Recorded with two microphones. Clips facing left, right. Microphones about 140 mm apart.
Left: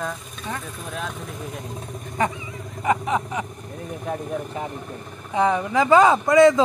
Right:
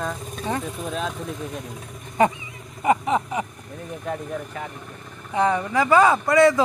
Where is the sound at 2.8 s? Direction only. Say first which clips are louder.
Right 2 dB; 5° right (ahead or behind).